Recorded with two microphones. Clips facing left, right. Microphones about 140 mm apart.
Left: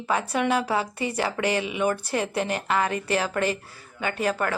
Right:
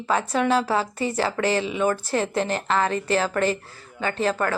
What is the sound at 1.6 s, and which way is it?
Speech, 15° left (ahead or behind).